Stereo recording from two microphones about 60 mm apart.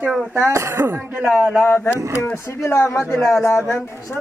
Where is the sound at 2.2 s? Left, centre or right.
Left.